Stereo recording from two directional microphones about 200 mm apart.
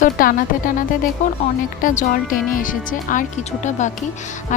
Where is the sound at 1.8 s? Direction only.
40° left (ahead or behind).